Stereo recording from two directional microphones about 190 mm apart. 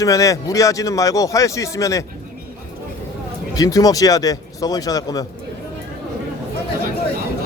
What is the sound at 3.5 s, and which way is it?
Speech, 20° left (ahead or behind).